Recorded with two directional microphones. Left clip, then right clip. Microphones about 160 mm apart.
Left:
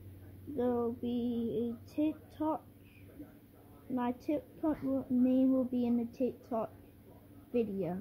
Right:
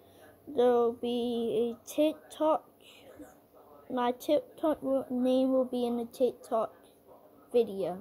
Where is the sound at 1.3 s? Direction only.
60° right (ahead or behind).